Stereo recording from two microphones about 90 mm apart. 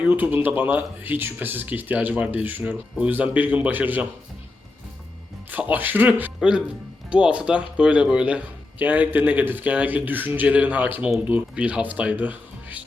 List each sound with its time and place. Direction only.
0.0 s speech: 15° right (ahead or behind)
5.5 s speech: 20° right (ahead or behind)